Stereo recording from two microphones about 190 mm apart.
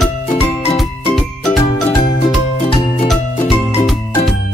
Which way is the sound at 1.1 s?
Centre (ahead or behind).